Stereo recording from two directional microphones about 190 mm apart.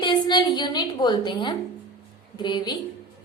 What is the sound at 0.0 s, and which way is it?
A woman's voice, 25° left (ahead or behind).